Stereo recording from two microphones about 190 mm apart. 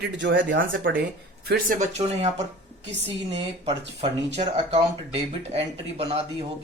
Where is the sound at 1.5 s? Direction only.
50° right (ahead or behind); by 6.5 s 30° right (ahead or behind).